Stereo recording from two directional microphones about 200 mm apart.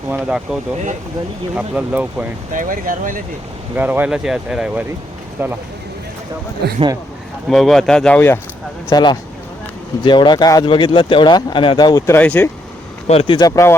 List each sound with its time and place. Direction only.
0.1 s speech: 5° right (ahead or behind)
2.5 s speech: 40° right (ahead or behind)
3.8 s speech: 10° right (ahead or behind)
6.6 s speech: 55° right (ahead or behind)
7.5 s speech: centre (ahead or behind)
8.9 s speech: 20° left (ahead or behind)
13.1 s speech: 25° left (ahead or behind)